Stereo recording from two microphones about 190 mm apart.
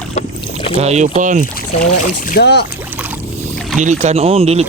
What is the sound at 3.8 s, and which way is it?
Speech, 40° right (ahead or behind).